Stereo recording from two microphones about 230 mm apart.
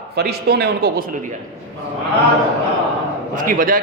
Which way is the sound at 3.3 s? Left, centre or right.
Right.